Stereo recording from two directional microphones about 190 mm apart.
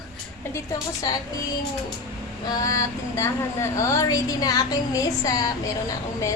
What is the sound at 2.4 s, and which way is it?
A woman's voice, 20° left (ahead or behind).